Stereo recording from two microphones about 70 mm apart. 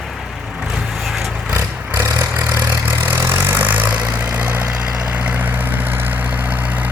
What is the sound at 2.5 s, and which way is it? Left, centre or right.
Vehicle, right.